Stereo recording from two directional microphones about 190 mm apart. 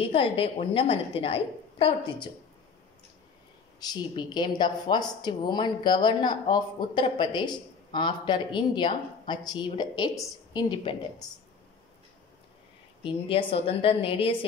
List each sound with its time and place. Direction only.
0.0 s speech: 30° left (ahead or behind)
3.8 s speech: 20° left (ahead or behind)
13.0 s speech: 30° left (ahead or behind)